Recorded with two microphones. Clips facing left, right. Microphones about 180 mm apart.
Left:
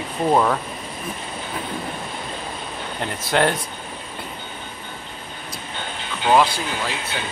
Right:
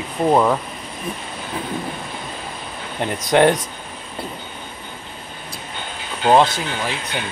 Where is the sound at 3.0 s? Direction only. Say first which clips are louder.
Right 5 dB; 15° right (ahead or behind).